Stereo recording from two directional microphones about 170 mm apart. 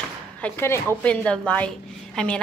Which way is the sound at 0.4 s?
15° left (ahead or behind).